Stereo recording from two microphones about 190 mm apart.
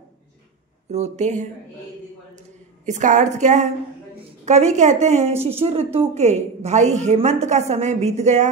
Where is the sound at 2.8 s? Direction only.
40° right (ahead or behind).